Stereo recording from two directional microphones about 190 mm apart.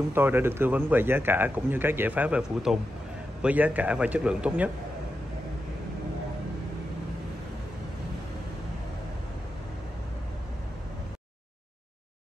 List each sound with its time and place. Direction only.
0.1 s a man's voice: 10° right (ahead or behind)